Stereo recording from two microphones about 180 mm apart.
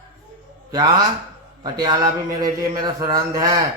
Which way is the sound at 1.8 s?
20° right (ahead or behind).